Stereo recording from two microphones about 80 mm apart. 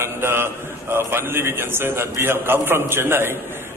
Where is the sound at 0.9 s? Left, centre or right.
Right.